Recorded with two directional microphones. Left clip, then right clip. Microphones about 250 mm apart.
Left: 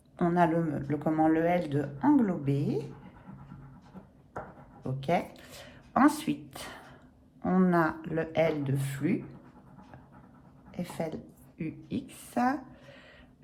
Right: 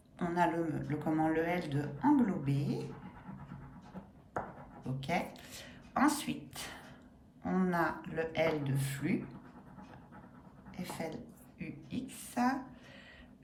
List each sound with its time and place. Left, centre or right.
0.2 s speech: centre
5.0 s a woman's voice: centre
10.7 s a woman's voice: centre